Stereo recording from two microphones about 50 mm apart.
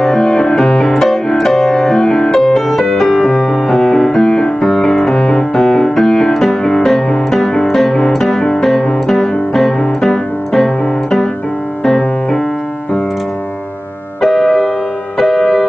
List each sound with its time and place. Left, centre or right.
0.0 s music: centre
1.5 s keyboard: centre
2.0 s music: centre
2.3 s music: centre
3.3 s music: left
8.1 s guitar: centre
8.5 s music: centre
14.2 s music: centre